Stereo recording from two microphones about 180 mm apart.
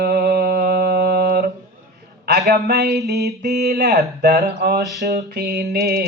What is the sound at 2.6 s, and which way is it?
Mantra, 65° right (ahead or behind).